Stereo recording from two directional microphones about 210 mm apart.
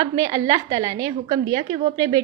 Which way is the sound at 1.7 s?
25° right (ahead or behind).